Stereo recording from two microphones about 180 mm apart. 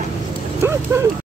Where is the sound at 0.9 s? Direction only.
15° right (ahead or behind).